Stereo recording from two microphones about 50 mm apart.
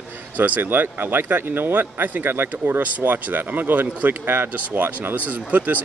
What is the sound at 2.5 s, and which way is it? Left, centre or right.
Speech, right.